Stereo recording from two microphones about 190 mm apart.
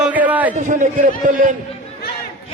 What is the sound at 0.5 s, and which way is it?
A man's voice, 40° right (ahead or behind).